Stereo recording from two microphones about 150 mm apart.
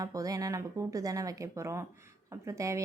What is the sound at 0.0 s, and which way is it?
A woman's voice, 25° right (ahead or behind).